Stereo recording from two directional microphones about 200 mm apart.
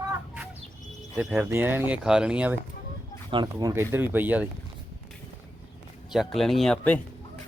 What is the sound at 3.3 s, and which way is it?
Speech, 20° right (ahead or behind).